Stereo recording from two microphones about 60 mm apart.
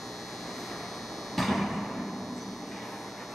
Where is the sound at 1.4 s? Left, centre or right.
Centre.